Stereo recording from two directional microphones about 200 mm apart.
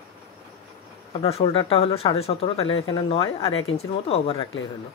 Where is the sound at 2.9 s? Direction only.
30° left (ahead or behind).